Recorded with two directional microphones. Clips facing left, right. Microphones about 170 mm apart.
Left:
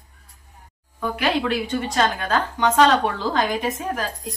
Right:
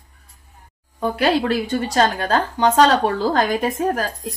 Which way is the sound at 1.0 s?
35° right (ahead or behind).